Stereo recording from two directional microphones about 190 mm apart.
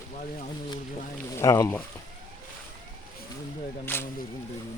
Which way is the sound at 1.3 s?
15° left (ahead or behind).